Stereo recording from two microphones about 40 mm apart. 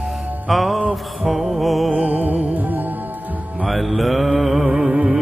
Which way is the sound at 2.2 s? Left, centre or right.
Right.